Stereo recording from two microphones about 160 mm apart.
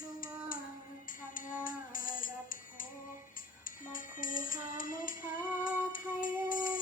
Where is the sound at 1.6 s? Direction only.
60° left (ahead or behind).